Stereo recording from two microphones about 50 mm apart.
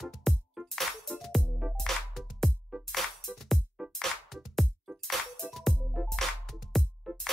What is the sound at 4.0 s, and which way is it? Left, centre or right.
Music, centre.